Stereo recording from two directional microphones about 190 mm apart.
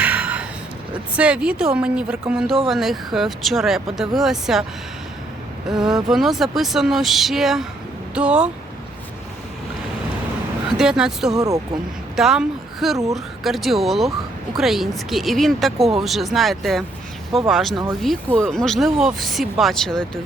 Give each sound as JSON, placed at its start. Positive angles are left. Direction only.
{"t": 0.0, "sound": "a sound", "side_deg": -5}
{"t": 1.1, "sound": "speech", "side_deg": -5}
{"t": 5.6, "sound": "speech", "side_deg": 0}
{"t": 10.8, "sound": "speech", "side_deg": -5}
{"t": 11.3, "sound": "speech", "side_deg": -20}
{"t": 12.1, "sound": "speech", "side_deg": 0}